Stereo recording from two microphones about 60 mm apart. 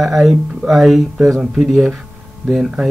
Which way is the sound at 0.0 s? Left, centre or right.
Centre.